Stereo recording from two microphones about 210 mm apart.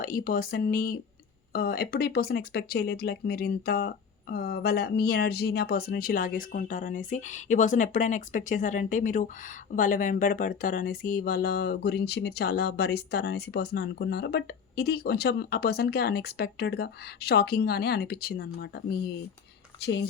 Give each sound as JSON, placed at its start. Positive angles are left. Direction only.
{"t": 0.0, "sound": "speech", "side_deg": 45}